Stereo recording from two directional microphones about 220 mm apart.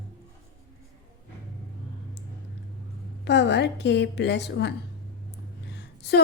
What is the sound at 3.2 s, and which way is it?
Speech, 50° left (ahead or behind).